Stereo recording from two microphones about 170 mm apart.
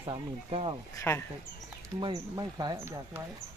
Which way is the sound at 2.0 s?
25° right (ahead or behind).